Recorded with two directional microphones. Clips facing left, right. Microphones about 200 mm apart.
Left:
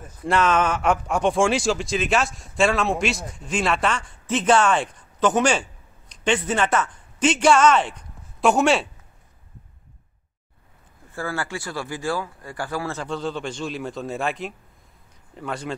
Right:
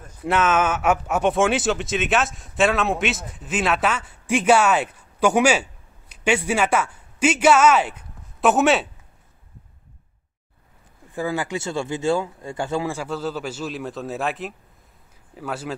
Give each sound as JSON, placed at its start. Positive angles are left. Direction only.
{"t": 0.2, "sound": "speech", "side_deg": -5}
{"t": 11.1, "sound": "speech", "side_deg": -15}
{"t": 12.9, "sound": "speech", "side_deg": -5}